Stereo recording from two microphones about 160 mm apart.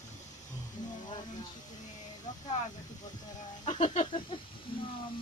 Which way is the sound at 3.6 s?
45° left (ahead or behind).